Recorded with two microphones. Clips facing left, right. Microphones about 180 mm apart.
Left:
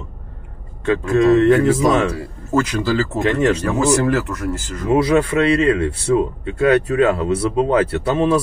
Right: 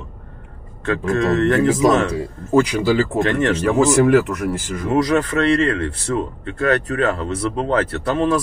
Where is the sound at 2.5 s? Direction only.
15° right (ahead or behind).